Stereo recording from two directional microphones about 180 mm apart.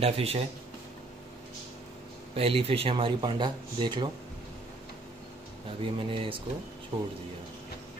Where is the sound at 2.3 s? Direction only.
35° right (ahead or behind).